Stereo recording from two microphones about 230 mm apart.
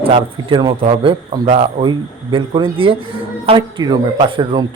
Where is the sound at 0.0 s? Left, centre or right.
Right.